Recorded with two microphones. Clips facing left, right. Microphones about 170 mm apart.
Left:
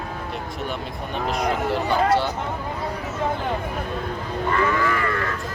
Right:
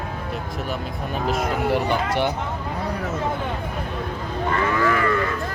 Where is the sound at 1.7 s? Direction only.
15° right (ahead or behind).